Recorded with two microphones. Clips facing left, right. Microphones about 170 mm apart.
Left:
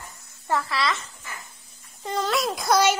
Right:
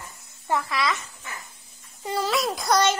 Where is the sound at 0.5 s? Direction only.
15° right (ahead or behind).